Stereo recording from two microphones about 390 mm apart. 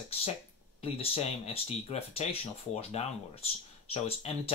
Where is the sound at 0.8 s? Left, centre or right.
Centre.